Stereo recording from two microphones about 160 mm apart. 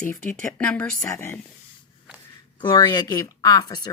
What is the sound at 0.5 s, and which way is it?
Speech, 5° left (ahead or behind).